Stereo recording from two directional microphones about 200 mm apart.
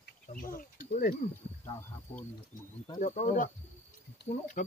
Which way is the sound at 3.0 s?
40° left (ahead or behind).